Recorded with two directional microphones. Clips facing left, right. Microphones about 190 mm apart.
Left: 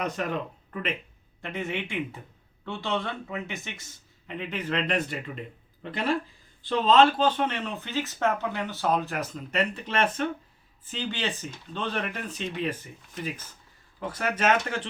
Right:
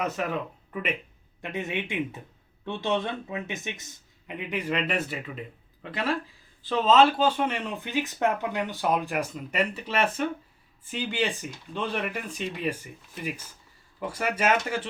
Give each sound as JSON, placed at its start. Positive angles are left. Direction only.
{"t": 0.0, "sound": "speech", "side_deg": -5}
{"t": 14.1, "sound": "speech", "side_deg": -10}